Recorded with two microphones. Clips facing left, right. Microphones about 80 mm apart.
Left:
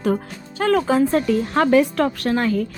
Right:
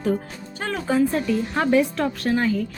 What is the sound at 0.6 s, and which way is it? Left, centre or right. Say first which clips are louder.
A woman's voice: left 5 dB; left.